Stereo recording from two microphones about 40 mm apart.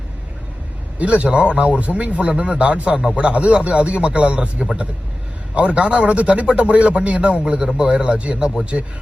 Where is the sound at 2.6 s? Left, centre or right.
Right.